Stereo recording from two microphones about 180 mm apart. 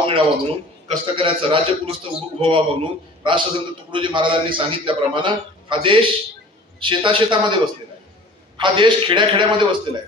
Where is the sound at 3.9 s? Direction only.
25° right (ahead or behind).